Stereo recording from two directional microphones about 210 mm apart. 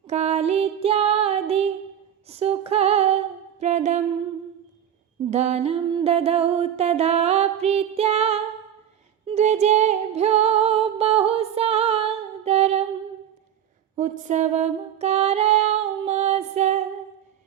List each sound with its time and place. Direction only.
0.1 s music: 30° right (ahead or behind)
2.3 s female singing: 30° right (ahead or behind)
3.6 s singing: 35° right (ahead or behind)
5.3 s music: 30° right (ahead or behind)
13.9 s music: 35° right (ahead or behind)